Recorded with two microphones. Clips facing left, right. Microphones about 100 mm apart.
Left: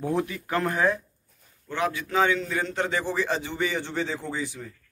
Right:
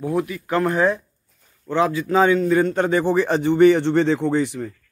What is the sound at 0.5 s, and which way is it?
A man's voice, 25° right (ahead or behind).